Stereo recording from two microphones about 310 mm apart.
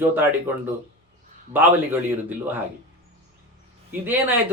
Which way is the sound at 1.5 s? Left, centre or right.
Centre.